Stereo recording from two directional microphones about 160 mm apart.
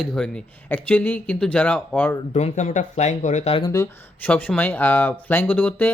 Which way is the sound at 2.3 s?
45° left (ahead or behind).